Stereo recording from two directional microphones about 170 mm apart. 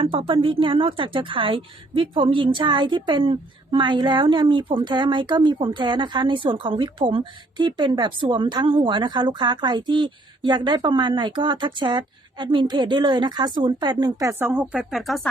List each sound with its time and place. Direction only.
0.0 s a woman's voice: 30° right (ahead or behind); by 15.3 s centre (ahead or behind)